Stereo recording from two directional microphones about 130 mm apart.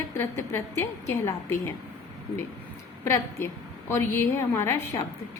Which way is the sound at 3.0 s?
20° left (ahead or behind).